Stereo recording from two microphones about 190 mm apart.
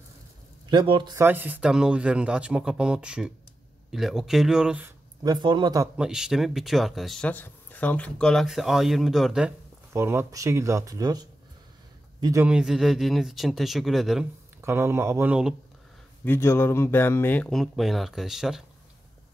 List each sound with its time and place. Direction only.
0.7 s speech: 25° right (ahead or behind)
1.2 s speech: 10° right (ahead or behind)
5.2 s speech: 25° right (ahead or behind)
5.9 s speech: 5° right (ahead or behind)
9.9 s speech: 15° right (ahead or behind)
12.4 s speech: 5° right (ahead or behind)
14.6 s speech: 10° right (ahead or behind)
16.3 s speech: 15° left (ahead or behind); by 18.6 s centre (ahead or behind)